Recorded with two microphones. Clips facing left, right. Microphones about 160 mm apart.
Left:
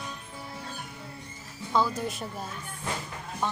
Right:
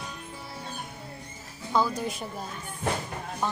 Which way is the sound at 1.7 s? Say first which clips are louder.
Right 1 dB; centre (ahead or behind).